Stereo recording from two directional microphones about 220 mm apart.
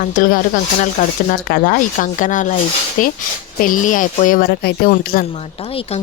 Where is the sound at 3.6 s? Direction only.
35° left (ahead or behind).